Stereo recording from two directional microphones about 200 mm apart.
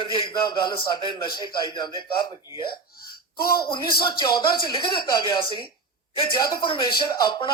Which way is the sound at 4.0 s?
25° left (ahead or behind).